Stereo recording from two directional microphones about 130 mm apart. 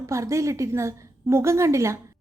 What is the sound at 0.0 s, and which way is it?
A woman's voice, 25° right (ahead or behind).